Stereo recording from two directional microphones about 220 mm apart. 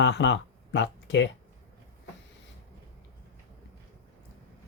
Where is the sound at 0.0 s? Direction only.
55° left (ahead or behind).